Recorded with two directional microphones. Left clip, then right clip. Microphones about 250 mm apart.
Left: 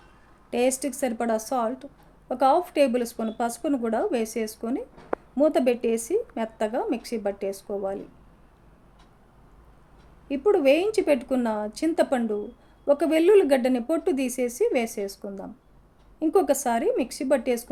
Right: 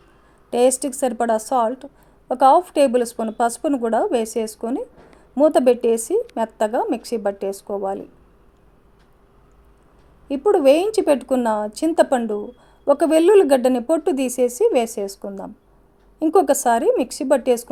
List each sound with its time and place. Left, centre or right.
0.5 s speech: right
10.2 s speech: right